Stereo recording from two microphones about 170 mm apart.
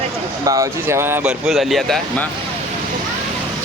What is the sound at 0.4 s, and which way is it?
Speech, 20° right (ahead or behind).